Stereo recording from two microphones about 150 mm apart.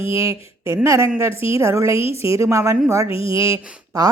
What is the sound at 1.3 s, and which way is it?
Speech, 40° left (ahead or behind).